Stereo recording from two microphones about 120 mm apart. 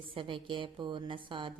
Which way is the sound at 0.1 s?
45° right (ahead or behind).